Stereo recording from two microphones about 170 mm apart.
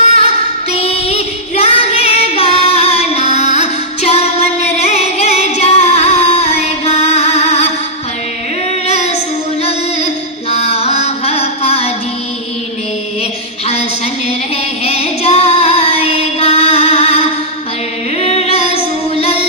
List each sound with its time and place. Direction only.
0.0 s female singing: 35° left (ahead or behind)
10.5 s music: 35° left (ahead or behind)
14.8 s child singing: 35° left (ahead or behind)
18.2 s music: 35° left (ahead or behind)